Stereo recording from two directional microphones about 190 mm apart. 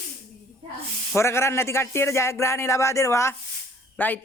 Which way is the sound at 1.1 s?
15° left (ahead or behind).